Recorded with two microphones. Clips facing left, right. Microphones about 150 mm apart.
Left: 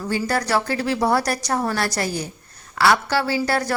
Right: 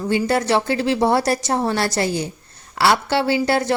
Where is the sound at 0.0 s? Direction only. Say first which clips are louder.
Right 4 dB; 20° right (ahead or behind).